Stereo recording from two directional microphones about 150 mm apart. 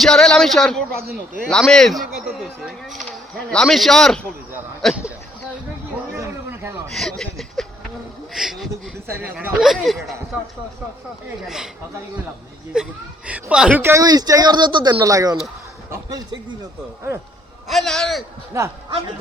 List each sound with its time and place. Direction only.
0.0 s speech: 5° left (ahead or behind)
6.1 s a sound: 15° right (ahead or behind)
6.9 s speech: 5° left (ahead or behind)
9.0 s speech: 15° right (ahead or behind); by 10.2 s centre (ahead or behind)
11.4 s speech: 5° right (ahead or behind)
12.7 s speech: 5° right (ahead or behind)
13.8 s speech: 20° right (ahead or behind)
17.7 s speech: centre (ahead or behind)
18.5 s speech: 20° right (ahead or behind)